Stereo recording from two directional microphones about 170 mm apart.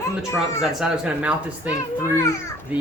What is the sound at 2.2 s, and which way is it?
Speech, 15° left (ahead or behind).